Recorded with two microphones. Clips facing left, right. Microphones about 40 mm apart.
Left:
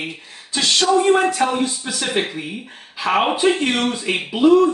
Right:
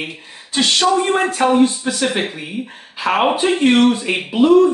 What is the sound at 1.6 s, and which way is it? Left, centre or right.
Speech, right.